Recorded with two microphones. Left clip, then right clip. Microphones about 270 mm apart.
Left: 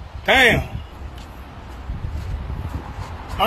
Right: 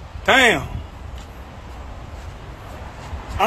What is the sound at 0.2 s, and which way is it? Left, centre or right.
Speech, centre.